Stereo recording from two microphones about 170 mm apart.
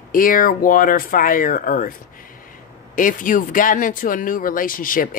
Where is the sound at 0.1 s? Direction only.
55° left (ahead or behind).